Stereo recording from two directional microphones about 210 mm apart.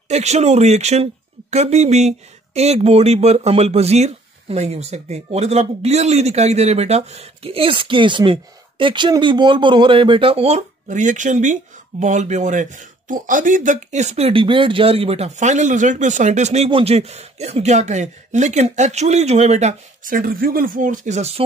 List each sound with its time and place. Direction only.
0.1 s speech: 30° right (ahead or behind)